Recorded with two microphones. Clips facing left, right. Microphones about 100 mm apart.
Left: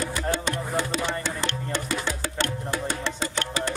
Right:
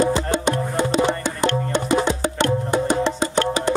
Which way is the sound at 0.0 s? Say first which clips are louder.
Right 8 dB; 20° right (ahead or behind).